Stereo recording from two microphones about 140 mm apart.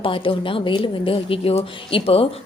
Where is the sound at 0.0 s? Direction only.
40° left (ahead or behind).